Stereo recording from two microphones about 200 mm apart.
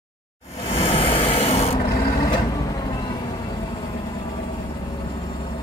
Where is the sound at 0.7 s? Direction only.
25° left (ahead or behind).